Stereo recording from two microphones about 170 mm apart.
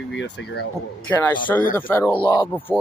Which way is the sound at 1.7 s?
10° left (ahead or behind).